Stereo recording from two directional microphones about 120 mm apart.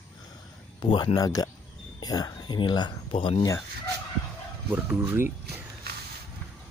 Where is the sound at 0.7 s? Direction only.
40° left (ahead or behind).